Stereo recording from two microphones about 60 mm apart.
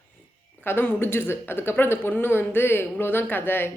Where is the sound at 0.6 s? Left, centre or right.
Left.